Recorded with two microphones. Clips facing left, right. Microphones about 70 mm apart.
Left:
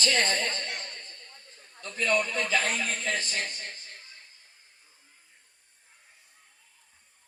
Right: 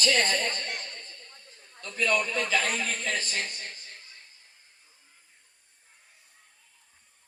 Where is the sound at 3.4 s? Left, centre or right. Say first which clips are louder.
Even; left.